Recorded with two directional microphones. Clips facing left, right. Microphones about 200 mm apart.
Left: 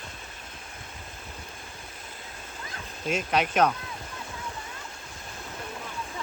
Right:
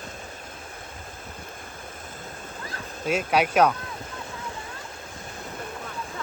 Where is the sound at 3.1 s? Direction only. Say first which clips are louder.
Right 3 dB; 10° right (ahead or behind).